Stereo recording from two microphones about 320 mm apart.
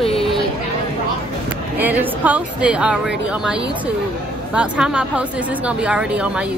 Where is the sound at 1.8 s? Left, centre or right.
Centre.